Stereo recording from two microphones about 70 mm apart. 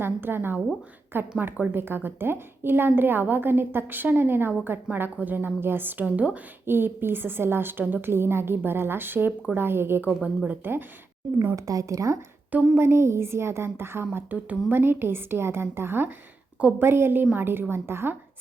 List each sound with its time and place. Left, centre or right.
0.0 s a woman's voice: right
10.2 s a woman's voice: centre
11.5 s a woman's voice: right
12.5 s a woman's voice: right
12.8 s a woman's voice: right
14.3 s a woman's voice: right
14.8 s a woman's voice: right